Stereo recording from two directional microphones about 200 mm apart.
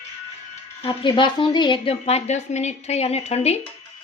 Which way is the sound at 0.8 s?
25° left (ahead or behind).